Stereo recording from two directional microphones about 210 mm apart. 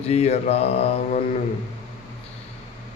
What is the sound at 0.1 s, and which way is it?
Mantra, 30° left (ahead or behind).